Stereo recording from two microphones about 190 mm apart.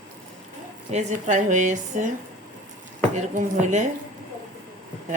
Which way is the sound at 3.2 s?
40° right (ahead or behind).